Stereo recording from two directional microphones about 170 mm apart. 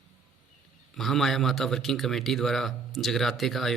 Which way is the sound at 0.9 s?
Centre (ahead or behind).